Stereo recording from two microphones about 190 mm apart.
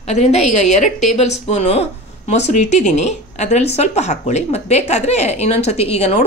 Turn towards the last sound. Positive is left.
turn(degrees=35)  # may be behind; listen again after turning